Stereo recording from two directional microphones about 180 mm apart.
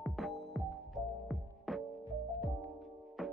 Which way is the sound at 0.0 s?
Centre (ahead or behind).